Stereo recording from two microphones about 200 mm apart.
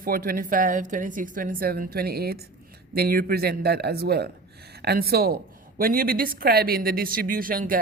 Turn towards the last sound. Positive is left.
turn(degrees=-45)  # may be behind; listen again after turning